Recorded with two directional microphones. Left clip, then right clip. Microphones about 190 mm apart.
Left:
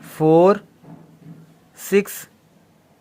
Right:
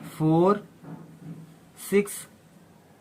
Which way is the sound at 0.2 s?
40° left (ahead or behind).